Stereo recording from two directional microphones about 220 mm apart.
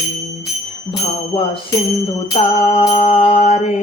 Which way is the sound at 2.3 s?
25° left (ahead or behind).